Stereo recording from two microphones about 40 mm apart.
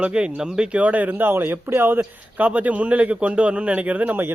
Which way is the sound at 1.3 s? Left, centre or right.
Right.